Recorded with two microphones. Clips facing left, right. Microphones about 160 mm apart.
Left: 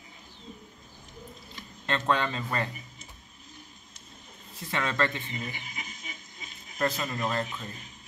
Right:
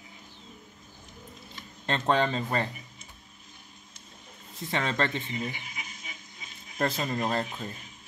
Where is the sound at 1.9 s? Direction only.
30° right (ahead or behind).